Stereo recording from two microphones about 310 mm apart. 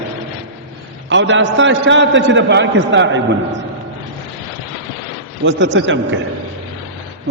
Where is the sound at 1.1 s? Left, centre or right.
Right.